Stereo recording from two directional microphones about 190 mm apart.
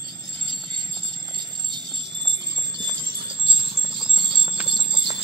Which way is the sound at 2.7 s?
25° right (ahead or behind).